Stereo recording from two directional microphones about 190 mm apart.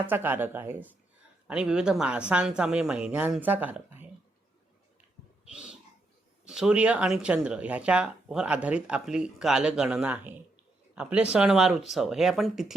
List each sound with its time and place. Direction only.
0.1 s speech: 10° right (ahead or behind)
5.5 s a sound: 5° right (ahead or behind)
6.4 s speech: 5° right (ahead or behind)